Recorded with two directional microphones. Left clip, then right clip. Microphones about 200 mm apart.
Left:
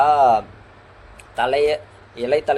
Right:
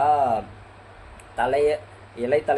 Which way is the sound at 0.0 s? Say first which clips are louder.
Left 6 dB; 55° left (ahead or behind).